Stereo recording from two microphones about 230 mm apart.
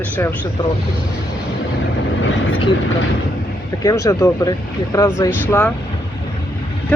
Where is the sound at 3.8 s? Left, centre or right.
Centre.